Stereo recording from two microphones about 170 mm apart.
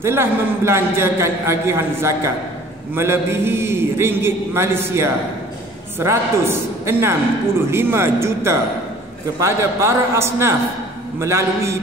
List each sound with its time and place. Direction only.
0.0 s a man's voice: 15° right (ahead or behind)